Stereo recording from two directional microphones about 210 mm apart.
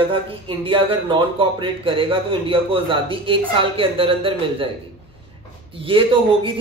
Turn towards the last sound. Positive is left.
turn(degrees=-25)  # may be behind; listen again after turning